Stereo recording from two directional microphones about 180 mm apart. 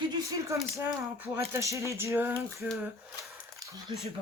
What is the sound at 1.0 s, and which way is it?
Speech, 10° right (ahead or behind).